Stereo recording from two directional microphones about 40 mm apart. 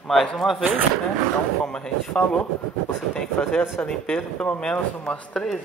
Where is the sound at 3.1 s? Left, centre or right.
Centre.